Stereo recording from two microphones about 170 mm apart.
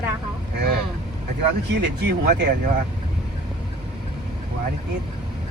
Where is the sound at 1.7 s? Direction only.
85° right.